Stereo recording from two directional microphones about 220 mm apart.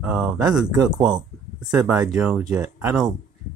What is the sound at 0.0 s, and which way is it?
Speech, 5° right (ahead or behind).